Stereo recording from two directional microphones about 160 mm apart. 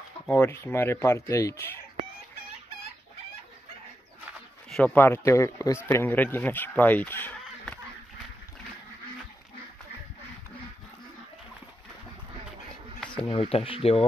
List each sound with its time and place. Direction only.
0.3 s speech: 15° left (ahead or behind)
4.6 s a sound: 5° left (ahead or behind)
4.9 s speech: 15° left (ahead or behind)
13.1 s speech: 35° left (ahead or behind)